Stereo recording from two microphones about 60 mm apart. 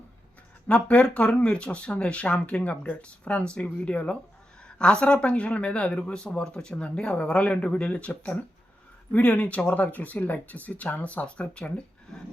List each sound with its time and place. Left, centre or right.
0.7 s speech: centre